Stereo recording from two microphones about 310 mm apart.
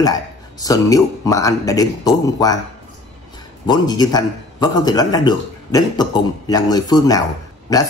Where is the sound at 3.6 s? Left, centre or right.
Centre.